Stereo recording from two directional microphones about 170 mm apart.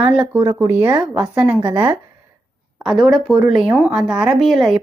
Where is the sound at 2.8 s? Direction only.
Centre (ahead or behind).